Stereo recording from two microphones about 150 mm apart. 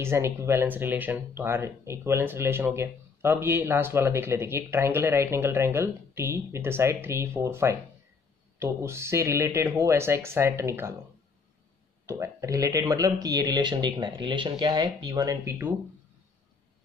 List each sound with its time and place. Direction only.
0.0 s speech: 15° right (ahead or behind)
12.1 s speech: 20° right (ahead or behind)